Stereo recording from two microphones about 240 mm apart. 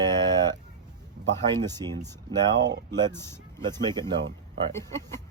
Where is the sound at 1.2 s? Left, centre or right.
Right.